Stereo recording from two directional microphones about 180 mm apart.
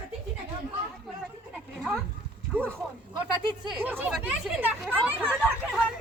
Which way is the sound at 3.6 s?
10° right (ahead or behind).